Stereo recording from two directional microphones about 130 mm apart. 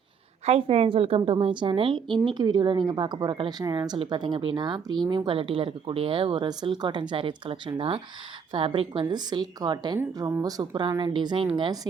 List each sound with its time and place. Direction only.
0.4 s a woman's voice: 50° right (ahead or behind)